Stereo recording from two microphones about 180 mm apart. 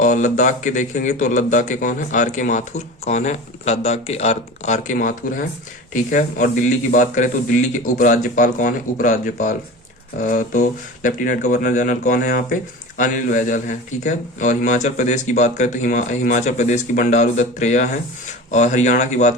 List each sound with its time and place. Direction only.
0.0 s speech: 45° left (ahead or behind)